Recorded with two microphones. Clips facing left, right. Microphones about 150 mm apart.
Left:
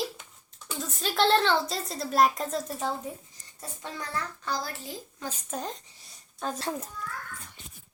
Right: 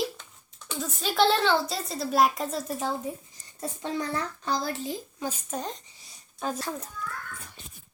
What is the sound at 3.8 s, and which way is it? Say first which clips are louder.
A child's voice: right 5 dB; 25° right (ahead or behind).